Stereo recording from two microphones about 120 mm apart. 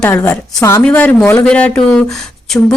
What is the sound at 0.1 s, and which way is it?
Speech, 20° left (ahead or behind).